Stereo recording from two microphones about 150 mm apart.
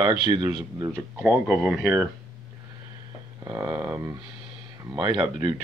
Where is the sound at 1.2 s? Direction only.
10° right (ahead or behind).